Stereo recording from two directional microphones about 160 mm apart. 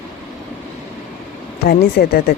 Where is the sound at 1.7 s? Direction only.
75° left (ahead or behind).